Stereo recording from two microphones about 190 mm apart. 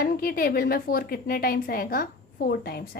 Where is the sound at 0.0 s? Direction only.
50° left (ahead or behind).